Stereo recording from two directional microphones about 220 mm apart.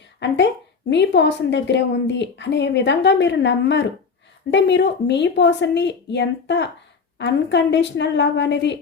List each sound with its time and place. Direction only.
0.2 s a woman's voice: 55° left (ahead or behind)